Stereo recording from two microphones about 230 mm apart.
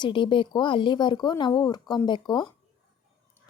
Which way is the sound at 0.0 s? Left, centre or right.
Left.